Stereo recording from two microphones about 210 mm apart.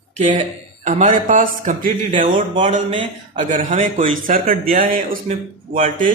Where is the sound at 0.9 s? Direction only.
35° right (ahead or behind).